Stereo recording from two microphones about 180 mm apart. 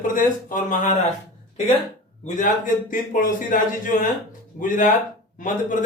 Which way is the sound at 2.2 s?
45° left (ahead or behind).